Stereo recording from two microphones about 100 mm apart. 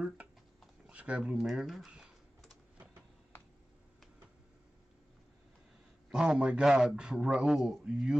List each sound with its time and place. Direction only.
0.8 s typing: 10° right (ahead or behind)
6.0 s a man's voice: 5° right (ahead or behind)